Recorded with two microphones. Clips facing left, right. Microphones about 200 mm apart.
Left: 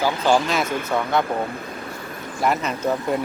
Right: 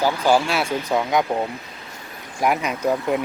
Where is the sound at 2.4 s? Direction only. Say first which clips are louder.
Right 1 dB; 10° right (ahead or behind).